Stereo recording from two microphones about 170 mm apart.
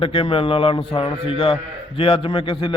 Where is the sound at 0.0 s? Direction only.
30° left (ahead or behind).